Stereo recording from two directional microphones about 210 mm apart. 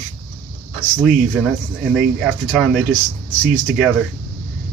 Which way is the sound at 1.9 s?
Centre (ahead or behind).